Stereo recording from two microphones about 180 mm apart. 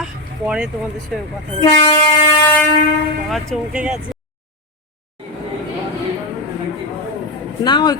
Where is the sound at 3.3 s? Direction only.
5° right (ahead or behind).